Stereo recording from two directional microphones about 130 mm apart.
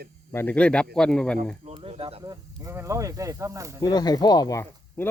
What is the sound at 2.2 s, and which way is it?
Speech, 25° right (ahead or behind).